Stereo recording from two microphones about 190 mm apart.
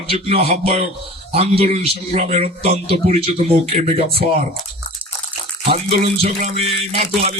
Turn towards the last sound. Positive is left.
turn(degrees=-35)  # may be behind; listen again after turning